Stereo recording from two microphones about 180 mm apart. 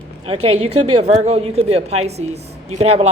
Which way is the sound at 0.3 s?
35° right (ahead or behind).